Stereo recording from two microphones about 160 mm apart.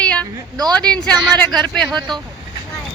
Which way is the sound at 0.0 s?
5° left (ahead or behind).